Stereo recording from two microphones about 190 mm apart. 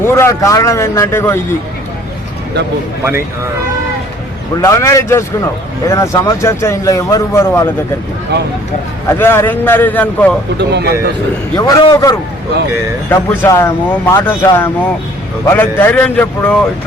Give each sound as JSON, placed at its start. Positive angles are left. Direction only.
{"t": 0.0, "sound": "speech", "side_deg": 15}
{"t": 3.0, "sound": "speech", "side_deg": -15}
{"t": 4.6, "sound": "speech", "side_deg": 15}
{"t": 9.0, "sound": "speech", "side_deg": 15}
{"t": 10.7, "sound": "a man's voice", "side_deg": -60}
{"t": 11.5, "sound": "a man's voice", "side_deg": 20}